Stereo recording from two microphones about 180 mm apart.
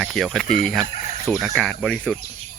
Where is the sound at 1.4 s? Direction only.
Centre (ahead or behind).